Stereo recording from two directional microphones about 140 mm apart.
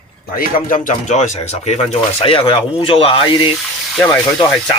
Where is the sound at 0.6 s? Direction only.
60° left (ahead or behind).